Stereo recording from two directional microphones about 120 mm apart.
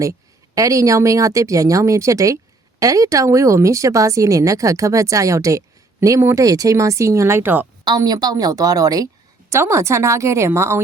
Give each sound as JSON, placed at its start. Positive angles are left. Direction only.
{"t": 0.0, "sound": "a woman's voice", "side_deg": -25}
{"t": 7.9, "sound": "a woman's voice", "side_deg": -35}